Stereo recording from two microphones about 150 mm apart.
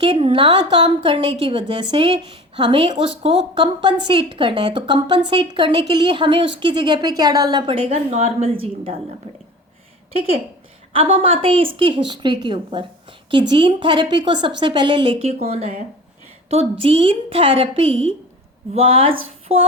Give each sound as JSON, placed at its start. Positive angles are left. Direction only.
{"t": 0.0, "sound": "a woman's voice", "side_deg": -35}
{"t": 7.7, "sound": "a woman's voice", "side_deg": -40}
{"t": 10.1, "sound": "a woman's voice", "side_deg": -40}
{"t": 15.3, "sound": "a woman's voice", "side_deg": -45}